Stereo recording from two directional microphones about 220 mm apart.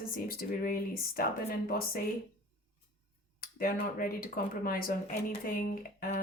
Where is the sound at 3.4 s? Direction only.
40° left (ahead or behind).